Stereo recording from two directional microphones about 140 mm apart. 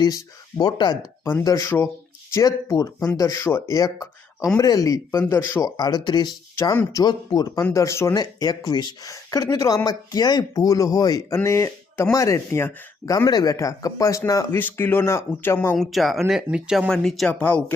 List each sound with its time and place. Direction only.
0.0 s speech: 25° left (ahead or behind)
1.2 s speech: 15° left (ahead or behind)
15.9 s speech: centre (ahead or behind)